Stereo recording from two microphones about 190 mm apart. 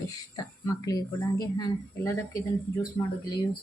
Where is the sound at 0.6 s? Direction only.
20° left (ahead or behind).